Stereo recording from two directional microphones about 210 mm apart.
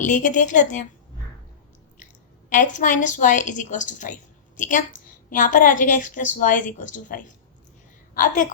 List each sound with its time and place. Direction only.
0.0 s a woman's voice: 35° left (ahead or behind)
2.5 s a woman's voice: 35° left (ahead or behind)